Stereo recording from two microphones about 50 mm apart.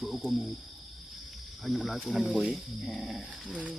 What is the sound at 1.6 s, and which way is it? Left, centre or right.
Speech, centre.